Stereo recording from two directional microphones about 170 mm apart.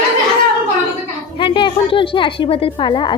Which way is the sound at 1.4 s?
30° left (ahead or behind).